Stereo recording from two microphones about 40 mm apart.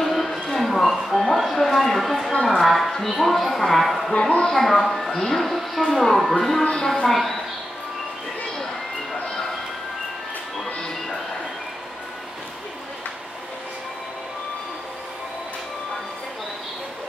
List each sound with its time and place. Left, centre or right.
0.0 s a sound: centre
2.9 s music: centre
4.2 s speech: left
4.6 s a woman's voice: centre
6.6 s speech: centre
7.1 s a woman's voice: centre